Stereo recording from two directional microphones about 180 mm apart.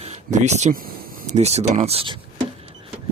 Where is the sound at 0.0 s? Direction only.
40° right (ahead or behind).